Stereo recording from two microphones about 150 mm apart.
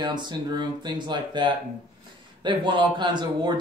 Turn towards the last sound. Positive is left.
turn(degrees=-30)  # may be behind; listen again after turning